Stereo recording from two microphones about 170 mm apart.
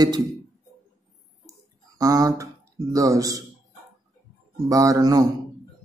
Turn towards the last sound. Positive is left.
turn(degrees=-20)  # may be behind; listen again after turning